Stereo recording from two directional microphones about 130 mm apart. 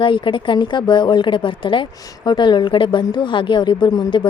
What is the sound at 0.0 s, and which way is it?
A woman's voice, 40° left (ahead or behind).